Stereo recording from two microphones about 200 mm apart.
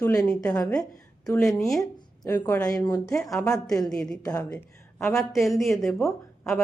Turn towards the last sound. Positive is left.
turn(degrees=0)  # may be behind; listen again after turning